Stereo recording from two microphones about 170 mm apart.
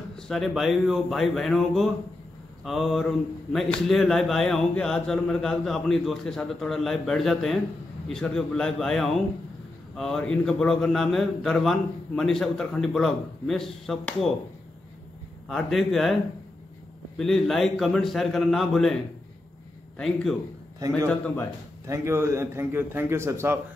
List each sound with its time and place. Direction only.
0.1 s speech: centre (ahead or behind)
15.4 s speech: centre (ahead or behind)
17.2 s speech: centre (ahead or behind)
21.8 s a man's voice: 15° right (ahead or behind)